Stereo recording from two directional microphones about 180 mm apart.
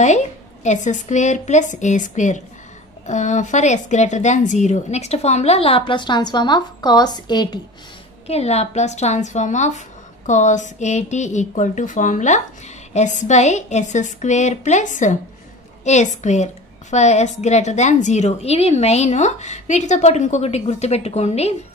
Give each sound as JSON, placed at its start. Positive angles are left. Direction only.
{"t": 0.0, "sound": "a woman's voice", "side_deg": 40}
{"t": 8.3, "sound": "a woman's voice", "side_deg": 35}